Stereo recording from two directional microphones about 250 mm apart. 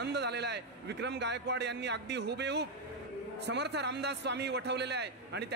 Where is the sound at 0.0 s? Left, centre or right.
Right.